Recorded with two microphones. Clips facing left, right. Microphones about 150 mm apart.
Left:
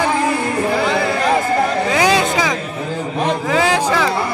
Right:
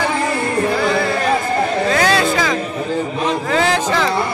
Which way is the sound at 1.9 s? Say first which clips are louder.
Even; 15° left (ahead or behind).